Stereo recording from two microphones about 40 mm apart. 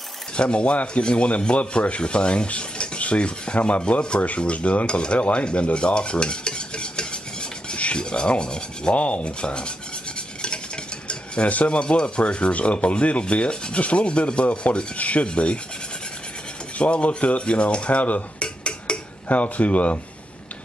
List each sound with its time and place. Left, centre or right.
0.4 s rub: left
4.2 s speech: left
11.1 s rub: left
16.7 s speech: left
18.4 s dishes: left
19.2 s speech: left